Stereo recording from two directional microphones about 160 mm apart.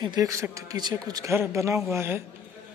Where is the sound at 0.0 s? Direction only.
25° right (ahead or behind).